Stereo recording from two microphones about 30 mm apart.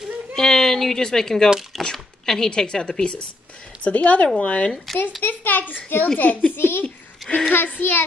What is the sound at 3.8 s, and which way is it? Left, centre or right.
Speech, left.